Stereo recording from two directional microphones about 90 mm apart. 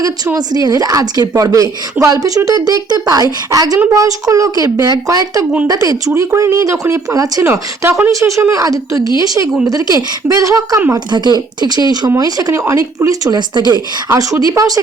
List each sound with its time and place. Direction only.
0.3 s a woman's voice: 45° right (ahead or behind)
11.1 s speech: 55° right (ahead or behind)
12.1 s a woman's voice: 40° right (ahead or behind)
14.1 s a woman's voice: 40° right (ahead or behind)